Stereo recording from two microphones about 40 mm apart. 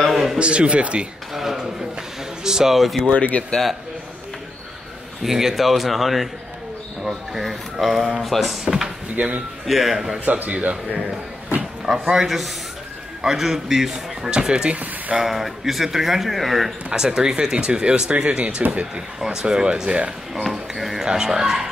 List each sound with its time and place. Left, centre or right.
0.1 s a sound: centre
0.4 s speech: right
1.3 s speech: centre
3.1 s speech: left
5.2 s speech: centre
9.1 s speech: right
9.7 s speech: centre
10.4 s speech: right
12.2 s speech: centre
14.3 s speech: right
15.2 s speech: centre
16.9 s speech: centre
19.1 s speech: centre
21.0 s speech: centre